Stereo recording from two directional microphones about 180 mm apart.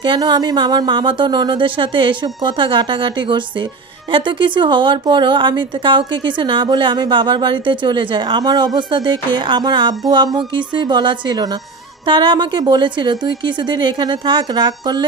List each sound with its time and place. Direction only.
0.0 s a woman's voice: 25° right (ahead or behind)